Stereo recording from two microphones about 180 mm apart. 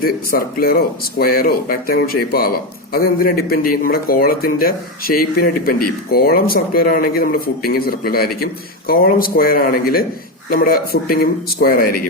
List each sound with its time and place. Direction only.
0.0 s a man's voice: 55° left (ahead or behind)